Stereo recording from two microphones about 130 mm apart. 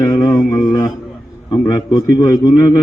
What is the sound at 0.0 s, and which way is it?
Mantra, 30° left (ahead or behind).